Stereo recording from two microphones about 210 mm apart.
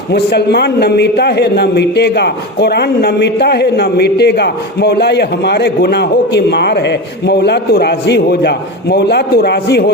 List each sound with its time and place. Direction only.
0.1 s a man's voice: 50° left (ahead or behind)